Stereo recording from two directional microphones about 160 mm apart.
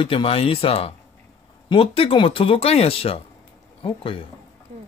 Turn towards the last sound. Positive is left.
turn(degrees=35)  # may be behind; listen again after turning